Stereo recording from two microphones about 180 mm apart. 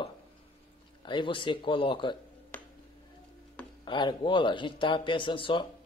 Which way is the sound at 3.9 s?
25° left (ahead or behind).